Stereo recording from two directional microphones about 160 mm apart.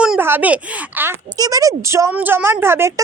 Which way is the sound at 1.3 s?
25° right (ahead or behind).